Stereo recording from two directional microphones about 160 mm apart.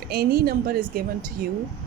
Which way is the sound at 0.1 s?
75° right (ahead or behind).